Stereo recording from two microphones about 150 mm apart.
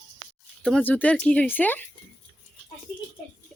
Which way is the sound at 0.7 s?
10° left (ahead or behind).